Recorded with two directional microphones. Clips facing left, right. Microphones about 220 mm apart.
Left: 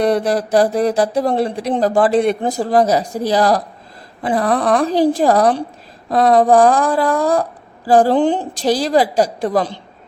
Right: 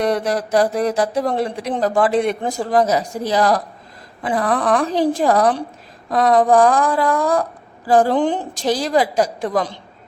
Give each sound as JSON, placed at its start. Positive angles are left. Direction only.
{"t": 0.0, "sound": "speech", "side_deg": 30}